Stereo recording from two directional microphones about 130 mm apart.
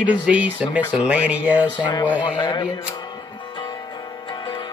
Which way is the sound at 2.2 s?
35° left (ahead or behind).